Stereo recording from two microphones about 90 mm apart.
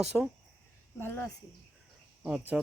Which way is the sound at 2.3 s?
10° right (ahead or behind).